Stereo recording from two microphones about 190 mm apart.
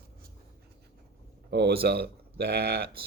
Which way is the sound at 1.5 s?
60° right (ahead or behind).